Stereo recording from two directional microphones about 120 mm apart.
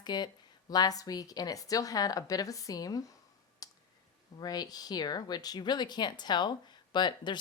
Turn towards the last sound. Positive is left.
turn(degrees=40)  # may be behind; listen again after turning